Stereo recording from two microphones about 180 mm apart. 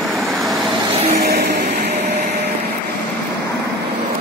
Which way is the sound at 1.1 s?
60° right (ahead or behind).